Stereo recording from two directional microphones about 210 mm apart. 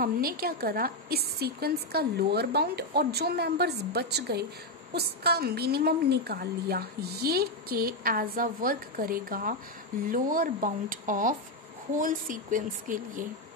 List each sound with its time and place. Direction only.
0.0 s a woman's voice: 45° right (ahead or behind)